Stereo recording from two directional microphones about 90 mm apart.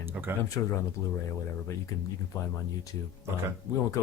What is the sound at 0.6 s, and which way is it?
Speech, 25° left (ahead or behind).